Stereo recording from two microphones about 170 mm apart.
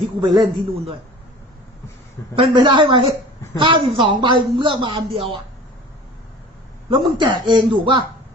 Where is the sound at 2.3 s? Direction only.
30° right (ahead or behind).